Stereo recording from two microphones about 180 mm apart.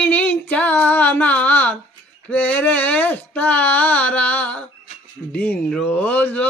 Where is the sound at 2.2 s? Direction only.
10° left (ahead or behind).